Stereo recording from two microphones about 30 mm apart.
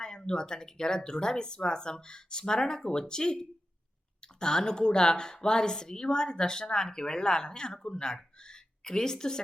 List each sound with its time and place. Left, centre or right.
0.0 s speech: left